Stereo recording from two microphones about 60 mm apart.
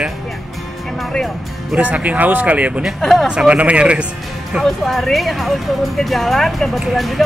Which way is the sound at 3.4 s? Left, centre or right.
Right.